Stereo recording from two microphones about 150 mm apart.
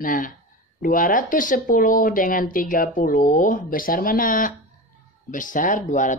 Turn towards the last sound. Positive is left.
turn(degrees=60)  # may be behind; listen again after turning